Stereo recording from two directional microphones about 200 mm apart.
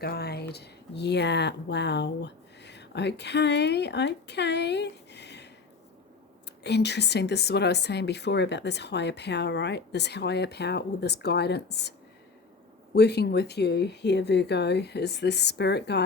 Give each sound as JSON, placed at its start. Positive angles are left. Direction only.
{"t": 0.0, "sound": "speech", "side_deg": 50}
{"t": 6.6, "sound": "speech", "side_deg": 55}